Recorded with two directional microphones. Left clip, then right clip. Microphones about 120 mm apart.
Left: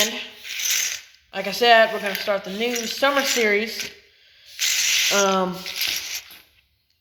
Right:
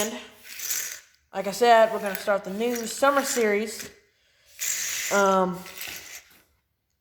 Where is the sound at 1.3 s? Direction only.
45° right (ahead or behind).